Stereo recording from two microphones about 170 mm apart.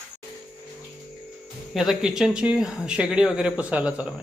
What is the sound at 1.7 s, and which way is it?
A man's voice, centre (ahead or behind).